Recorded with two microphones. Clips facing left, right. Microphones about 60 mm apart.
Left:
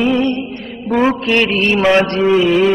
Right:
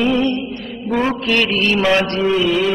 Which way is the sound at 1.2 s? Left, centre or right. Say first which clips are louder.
Left 3 dB; left.